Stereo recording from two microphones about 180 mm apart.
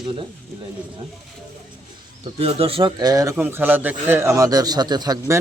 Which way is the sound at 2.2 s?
35° right (ahead or behind).